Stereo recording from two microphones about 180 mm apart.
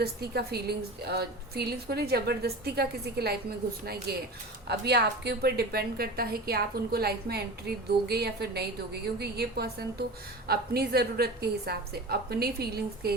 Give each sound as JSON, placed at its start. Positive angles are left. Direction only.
{"t": 0.0, "sound": "a woman's voice", "side_deg": -60}